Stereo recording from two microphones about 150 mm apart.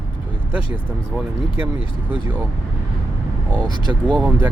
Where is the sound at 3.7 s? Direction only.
30° right (ahead or behind).